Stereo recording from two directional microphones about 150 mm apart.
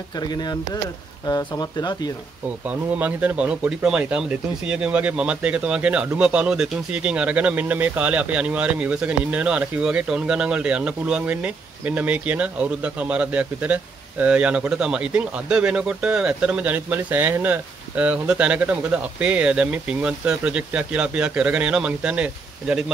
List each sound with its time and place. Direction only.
0.2 s speech: 25° left (ahead or behind)
2.6 s speech: 10° right (ahead or behind)